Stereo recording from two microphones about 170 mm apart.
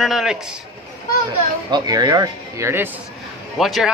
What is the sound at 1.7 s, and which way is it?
Speech, 25° right (ahead or behind).